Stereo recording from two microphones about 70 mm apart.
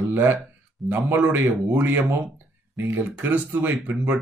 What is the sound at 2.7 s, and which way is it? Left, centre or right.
Speech, right.